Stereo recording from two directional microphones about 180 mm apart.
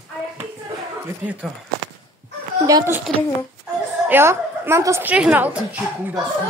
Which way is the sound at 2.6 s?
15° right (ahead or behind).